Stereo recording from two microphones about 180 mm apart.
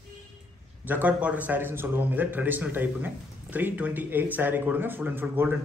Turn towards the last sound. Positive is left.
turn(degrees=-10)  # may be behind; listen again after turning